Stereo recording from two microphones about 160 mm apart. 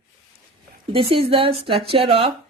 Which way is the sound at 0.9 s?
35° right (ahead or behind).